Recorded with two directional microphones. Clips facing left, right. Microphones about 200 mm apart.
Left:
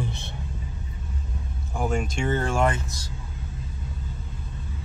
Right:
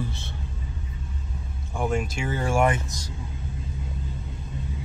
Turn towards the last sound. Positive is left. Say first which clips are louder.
# right 2 dB
turn(degrees=-15)  # may be behind; listen again after turning